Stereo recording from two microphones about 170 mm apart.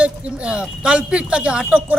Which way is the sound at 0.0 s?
5° right (ahead or behind).